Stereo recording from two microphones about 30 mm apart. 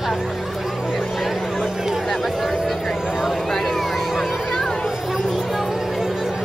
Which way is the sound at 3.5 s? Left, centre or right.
Centre.